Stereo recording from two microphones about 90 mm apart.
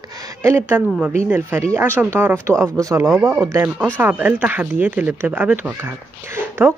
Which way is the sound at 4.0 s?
20° right (ahead or behind).